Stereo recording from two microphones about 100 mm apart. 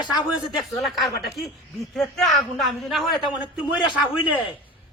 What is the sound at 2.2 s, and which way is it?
A man's voice, 5° left (ahead or behind).